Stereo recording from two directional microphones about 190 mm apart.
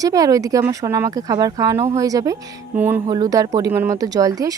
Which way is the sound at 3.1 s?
20° right (ahead or behind).